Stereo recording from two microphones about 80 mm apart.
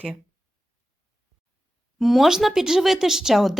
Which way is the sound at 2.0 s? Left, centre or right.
Centre.